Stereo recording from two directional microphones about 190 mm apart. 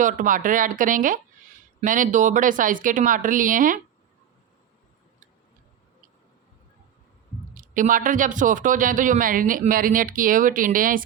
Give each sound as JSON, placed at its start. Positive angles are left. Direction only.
{"t": 0.0, "sound": "speech", "side_deg": -45}
{"t": 7.5, "sound": "speech", "side_deg": -45}